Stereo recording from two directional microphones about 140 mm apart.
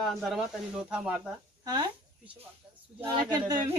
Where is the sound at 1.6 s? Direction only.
30° right (ahead or behind).